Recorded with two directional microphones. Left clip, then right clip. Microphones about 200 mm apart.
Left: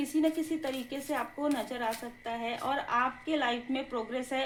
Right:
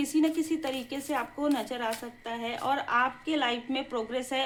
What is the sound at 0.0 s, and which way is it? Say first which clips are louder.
Speech: right 2 dB; 20° right (ahead or behind).